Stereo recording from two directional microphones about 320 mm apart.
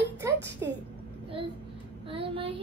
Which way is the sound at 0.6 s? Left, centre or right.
Centre.